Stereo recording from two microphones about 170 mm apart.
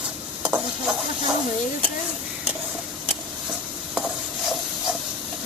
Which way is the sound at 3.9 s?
5° right (ahead or behind).